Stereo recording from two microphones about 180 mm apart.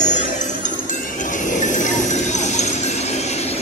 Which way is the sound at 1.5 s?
45° left (ahead or behind).